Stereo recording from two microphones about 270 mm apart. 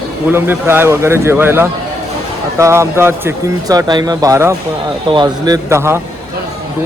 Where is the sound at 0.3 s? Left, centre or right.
Centre.